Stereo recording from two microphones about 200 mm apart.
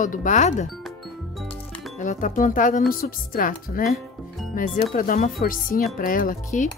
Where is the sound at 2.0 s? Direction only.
40° left (ahead or behind).